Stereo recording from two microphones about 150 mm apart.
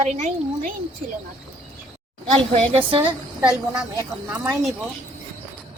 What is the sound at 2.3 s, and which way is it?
A woman's voice, 40° right (ahead or behind).